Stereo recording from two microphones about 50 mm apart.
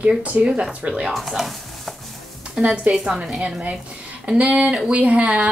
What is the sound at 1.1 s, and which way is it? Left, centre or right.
Speech, centre.